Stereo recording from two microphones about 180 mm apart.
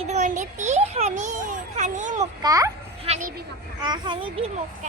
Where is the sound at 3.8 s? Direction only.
25° right (ahead or behind).